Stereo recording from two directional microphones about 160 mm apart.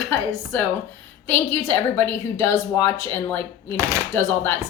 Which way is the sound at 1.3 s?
15° left (ahead or behind).